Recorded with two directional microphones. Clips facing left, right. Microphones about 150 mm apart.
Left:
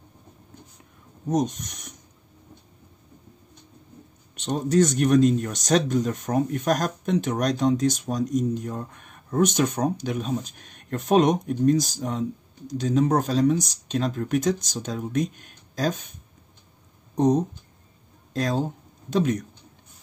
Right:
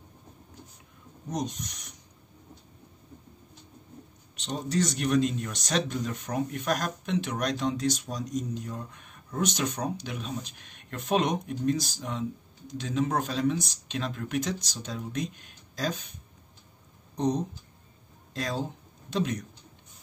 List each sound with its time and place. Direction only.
1.3 s speech: 50° left (ahead or behind)
4.5 s speech: 50° left (ahead or behind)
18.3 s speech: 45° left (ahead or behind)